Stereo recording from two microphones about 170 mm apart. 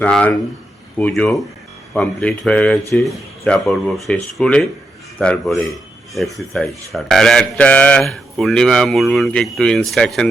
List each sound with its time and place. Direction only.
0.0 s speech: 5° left (ahead or behind)